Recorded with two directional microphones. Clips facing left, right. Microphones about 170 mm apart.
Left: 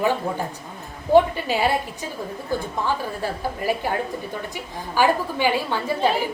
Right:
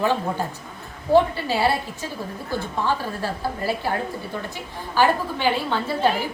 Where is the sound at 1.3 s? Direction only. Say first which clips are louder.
Even; 15° left (ahead or behind).